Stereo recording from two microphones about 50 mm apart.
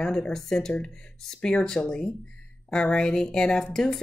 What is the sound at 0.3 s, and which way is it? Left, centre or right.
Speech, centre.